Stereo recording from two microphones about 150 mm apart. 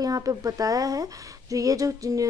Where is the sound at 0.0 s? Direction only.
25° right (ahead or behind).